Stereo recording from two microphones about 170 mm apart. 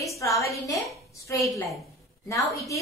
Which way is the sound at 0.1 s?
20° left (ahead or behind).